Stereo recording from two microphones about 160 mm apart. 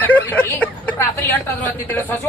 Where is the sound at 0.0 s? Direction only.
10° left (ahead or behind).